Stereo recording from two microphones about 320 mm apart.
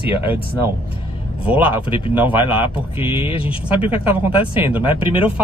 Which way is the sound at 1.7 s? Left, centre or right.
Centre.